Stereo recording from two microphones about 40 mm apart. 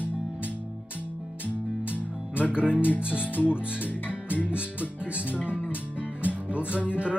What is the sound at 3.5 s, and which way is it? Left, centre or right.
Speech, right.